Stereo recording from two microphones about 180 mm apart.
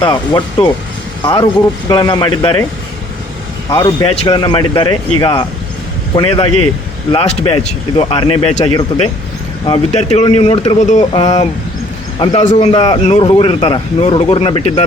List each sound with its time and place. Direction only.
0.0 s speech: 25° left (ahead or behind)
3.7 s speech: 20° left (ahead or behind)
4.0 s speech: 35° left (ahead or behind)